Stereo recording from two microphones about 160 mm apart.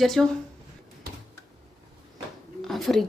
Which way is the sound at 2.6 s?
Centre (ahead or behind).